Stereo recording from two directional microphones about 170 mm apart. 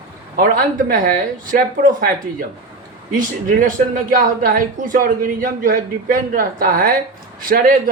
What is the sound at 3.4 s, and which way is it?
Speech, 55° right (ahead or behind).